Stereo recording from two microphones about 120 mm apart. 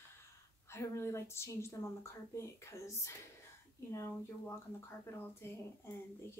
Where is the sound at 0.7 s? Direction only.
20° left (ahead or behind).